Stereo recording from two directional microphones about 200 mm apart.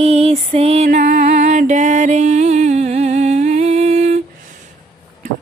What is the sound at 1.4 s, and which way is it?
Music, 40° right (ahead or behind).